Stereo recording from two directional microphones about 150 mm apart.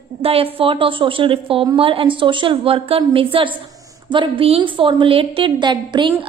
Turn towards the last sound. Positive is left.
turn(degrees=-30)  # may be behind; listen again after turning